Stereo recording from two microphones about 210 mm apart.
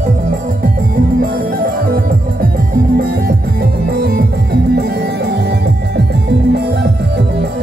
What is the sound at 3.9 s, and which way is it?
Music, 50° right (ahead or behind).